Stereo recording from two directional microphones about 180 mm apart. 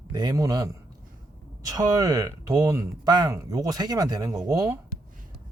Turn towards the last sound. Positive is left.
turn(degrees=-20)  # may be behind; listen again after turning